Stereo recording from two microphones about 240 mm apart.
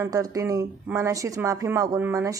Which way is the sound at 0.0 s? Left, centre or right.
Centre.